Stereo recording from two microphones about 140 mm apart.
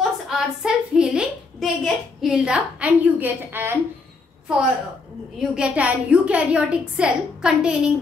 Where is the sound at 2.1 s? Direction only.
5° right (ahead or behind).